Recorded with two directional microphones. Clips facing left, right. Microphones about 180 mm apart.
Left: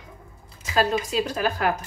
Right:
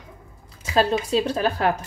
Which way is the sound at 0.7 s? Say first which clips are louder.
Right 2 dB; 30° right (ahead or behind).